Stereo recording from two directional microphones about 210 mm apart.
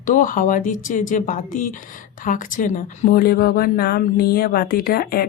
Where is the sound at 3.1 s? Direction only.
45° left (ahead or behind).